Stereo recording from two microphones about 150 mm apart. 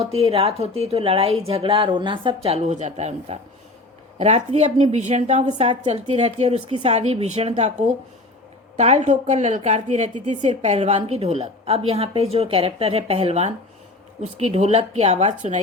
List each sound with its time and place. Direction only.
0.1 s a woman's voice: 40° right (ahead or behind)